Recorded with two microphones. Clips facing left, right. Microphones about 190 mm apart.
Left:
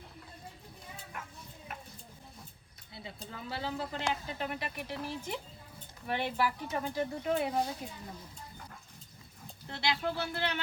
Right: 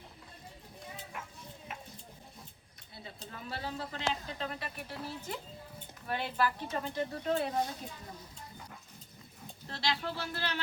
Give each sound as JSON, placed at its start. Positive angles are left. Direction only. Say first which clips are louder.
{"t": 3.5, "sound": "speech", "louder": "left 3 dB", "side_deg": 20}
{"t": 9.6, "sound": "speech", "louder": "left 2 dB", "side_deg": 15}